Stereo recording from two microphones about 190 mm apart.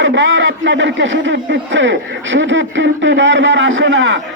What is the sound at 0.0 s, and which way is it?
Speech, 80° right.